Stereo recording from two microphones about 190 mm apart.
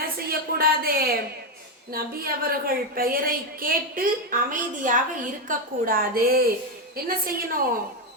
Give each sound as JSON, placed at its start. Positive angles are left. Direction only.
{"t": 0.0, "sound": "a woman's voice", "side_deg": -50}